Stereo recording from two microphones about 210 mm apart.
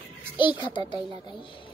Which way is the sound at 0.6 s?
20° left (ahead or behind).